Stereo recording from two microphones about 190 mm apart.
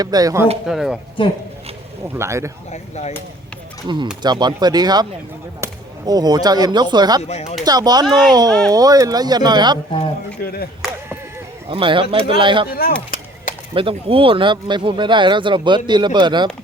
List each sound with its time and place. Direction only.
0.0 s speech: 20° right (ahead or behind)
0.6 s speech: centre (ahead or behind)
1.2 s speech: 25° left (ahead or behind)
2.1 s speech: 15° right (ahead or behind)
2.7 s speech: 35° left (ahead or behind)
3.8 s speech: 25° right (ahead or behind)
7.2 s speech: 35° left (ahead or behind)
7.6 s speech: 20° right (ahead or behind)
8.0 s speech: centre (ahead or behind)
8.3 s speech: 20° right (ahead or behind)
10.4 s speech: 55° left (ahead or behind)
11.7 s speech: 25° right (ahead or behind)
13.7 s speech: 30° right (ahead or behind)